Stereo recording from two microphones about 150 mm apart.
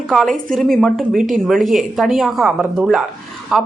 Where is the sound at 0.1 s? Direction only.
Centre (ahead or behind).